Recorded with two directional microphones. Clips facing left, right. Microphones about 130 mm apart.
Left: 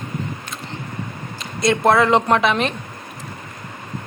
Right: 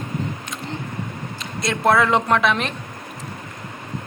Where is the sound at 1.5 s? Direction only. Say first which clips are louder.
Left 3 dB; centre (ahead or behind).